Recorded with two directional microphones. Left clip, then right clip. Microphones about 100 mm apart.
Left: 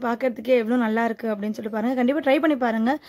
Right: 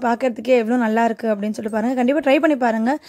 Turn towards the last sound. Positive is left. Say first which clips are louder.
# right 4 dB
turn(degrees=-40)  # may be behind; listen again after turning